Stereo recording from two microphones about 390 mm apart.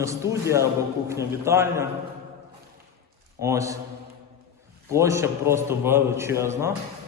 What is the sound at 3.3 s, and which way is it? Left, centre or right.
Speech, centre.